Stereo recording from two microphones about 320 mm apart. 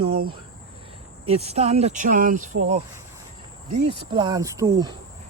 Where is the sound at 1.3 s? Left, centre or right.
Centre.